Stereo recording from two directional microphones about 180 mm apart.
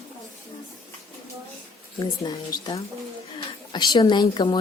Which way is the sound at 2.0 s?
20° left (ahead or behind).